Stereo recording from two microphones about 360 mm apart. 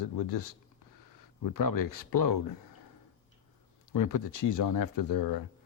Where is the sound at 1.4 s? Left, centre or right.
Left.